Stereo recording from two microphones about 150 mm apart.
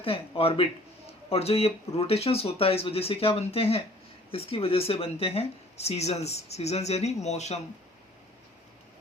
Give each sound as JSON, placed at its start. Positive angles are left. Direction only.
{"t": 0.0, "sound": "speech", "side_deg": 40}